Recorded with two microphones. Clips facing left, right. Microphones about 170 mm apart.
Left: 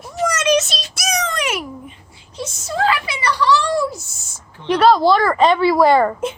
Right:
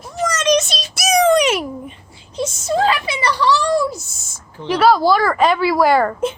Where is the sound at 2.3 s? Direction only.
25° right (ahead or behind).